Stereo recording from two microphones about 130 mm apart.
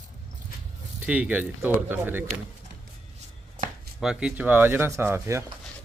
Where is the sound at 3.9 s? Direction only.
5° right (ahead or behind).